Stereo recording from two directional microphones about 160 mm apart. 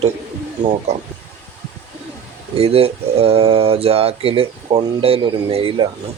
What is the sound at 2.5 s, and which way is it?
Speech, 40° right (ahead or behind).